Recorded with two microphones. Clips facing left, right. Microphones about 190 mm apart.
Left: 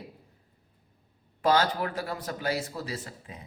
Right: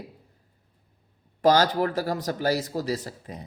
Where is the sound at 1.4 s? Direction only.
40° right (ahead or behind).